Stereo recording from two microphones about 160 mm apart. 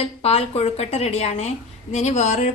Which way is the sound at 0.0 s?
40° left (ahead or behind).